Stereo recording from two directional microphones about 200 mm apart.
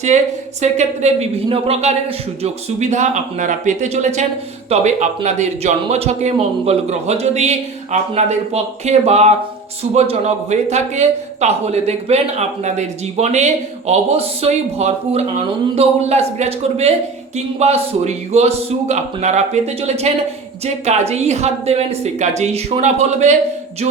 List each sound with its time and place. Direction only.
0.6 s a man's voice: 35° right (ahead or behind)